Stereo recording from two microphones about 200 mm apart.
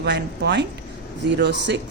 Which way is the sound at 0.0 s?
60° right (ahead or behind).